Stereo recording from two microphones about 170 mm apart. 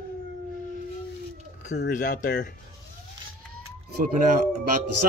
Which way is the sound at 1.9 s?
50° left (ahead or behind).